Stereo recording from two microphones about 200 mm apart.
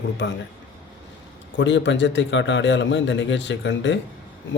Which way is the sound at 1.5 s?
65° left (ahead or behind).